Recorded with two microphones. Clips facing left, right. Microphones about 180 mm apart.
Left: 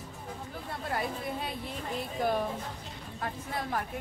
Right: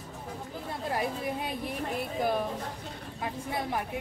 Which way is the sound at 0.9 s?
15° right (ahead or behind).